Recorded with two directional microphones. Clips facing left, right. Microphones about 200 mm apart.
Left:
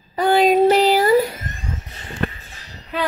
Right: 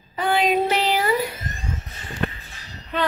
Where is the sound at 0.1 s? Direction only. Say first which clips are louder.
Left 5 dB; 40° left (ahead or behind).